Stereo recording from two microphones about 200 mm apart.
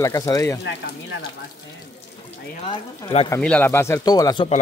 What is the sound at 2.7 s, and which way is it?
Speech, 25° left (ahead or behind).